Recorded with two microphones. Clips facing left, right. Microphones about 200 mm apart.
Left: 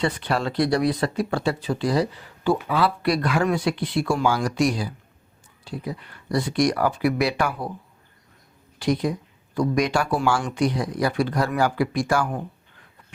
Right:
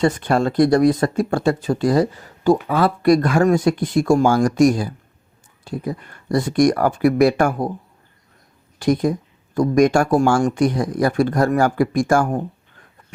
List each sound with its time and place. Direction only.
0.0 s speech: 45° right (ahead or behind)
8.8 s speech: 50° right (ahead or behind)